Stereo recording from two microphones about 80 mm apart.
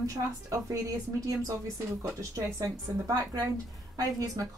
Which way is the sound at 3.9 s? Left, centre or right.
Right.